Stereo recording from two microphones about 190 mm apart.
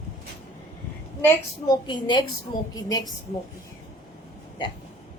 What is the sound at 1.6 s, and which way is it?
A woman's voice, 25° left (ahead or behind).